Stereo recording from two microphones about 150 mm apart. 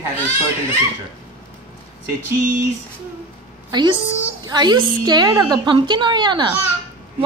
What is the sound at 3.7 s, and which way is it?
A woman's voice, 30° right (ahead or behind).